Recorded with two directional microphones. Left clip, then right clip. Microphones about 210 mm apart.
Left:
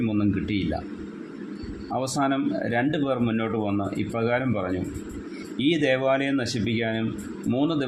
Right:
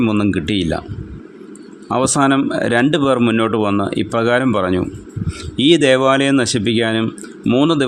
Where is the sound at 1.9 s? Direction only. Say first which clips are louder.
Right 11 dB; 45° right (ahead or behind).